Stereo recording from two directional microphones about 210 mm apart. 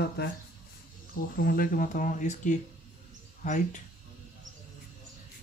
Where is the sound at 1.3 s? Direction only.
45° left (ahead or behind).